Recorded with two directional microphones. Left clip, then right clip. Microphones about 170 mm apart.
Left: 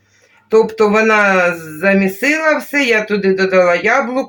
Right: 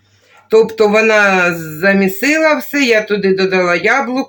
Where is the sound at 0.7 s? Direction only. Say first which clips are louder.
Right 1 dB; 35° right (ahead or behind).